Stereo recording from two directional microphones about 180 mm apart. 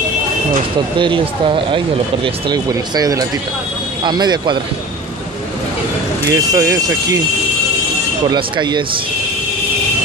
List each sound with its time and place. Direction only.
0.9 s speech: 25° right (ahead or behind)
6.3 s speech: 15° right (ahead or behind)
8.3 s speech: 25° right (ahead or behind)